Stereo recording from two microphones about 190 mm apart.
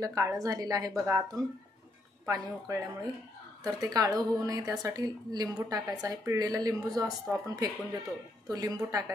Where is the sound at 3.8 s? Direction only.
20° right (ahead or behind).